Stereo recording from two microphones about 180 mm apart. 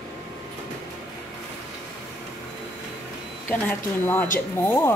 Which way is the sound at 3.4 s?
10° left (ahead or behind).